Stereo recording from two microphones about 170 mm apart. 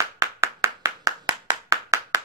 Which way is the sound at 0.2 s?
20° right (ahead or behind).